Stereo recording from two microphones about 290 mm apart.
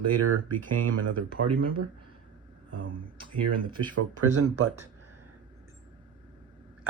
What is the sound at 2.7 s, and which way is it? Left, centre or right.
Speech, right.